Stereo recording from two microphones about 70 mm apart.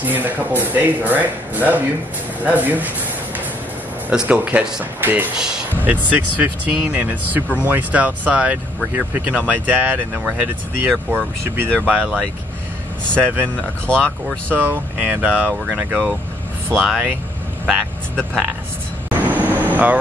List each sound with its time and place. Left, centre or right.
0.0 s speech: right
4.1 s speech: centre
5.8 s speech: right
10.1 s speech: centre
10.4 s speech: right
11.8 s speech: centre
13.6 s speech: centre
14.5 s speech: right
16.6 s speech: centre
19.2 s vehicle: right